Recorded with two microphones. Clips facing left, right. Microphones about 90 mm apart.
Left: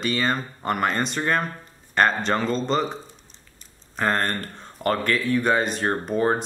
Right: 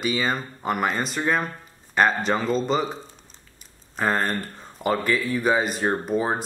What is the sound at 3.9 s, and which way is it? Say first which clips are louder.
Speech: even; 5° right (ahead or behind).